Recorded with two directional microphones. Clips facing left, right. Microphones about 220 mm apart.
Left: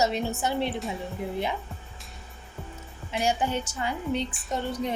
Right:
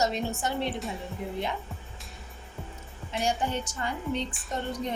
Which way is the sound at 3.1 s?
5° left (ahead or behind).